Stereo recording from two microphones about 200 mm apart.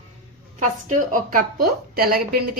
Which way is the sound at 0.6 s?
40° right (ahead or behind).